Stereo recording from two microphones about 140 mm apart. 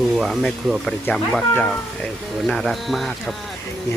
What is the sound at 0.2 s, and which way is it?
Speech, centre (ahead or behind).